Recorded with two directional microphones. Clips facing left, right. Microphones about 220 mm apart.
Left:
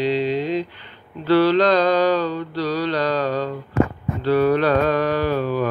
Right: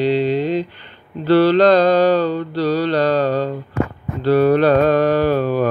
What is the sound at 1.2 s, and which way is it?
Mantra, 30° right (ahead or behind).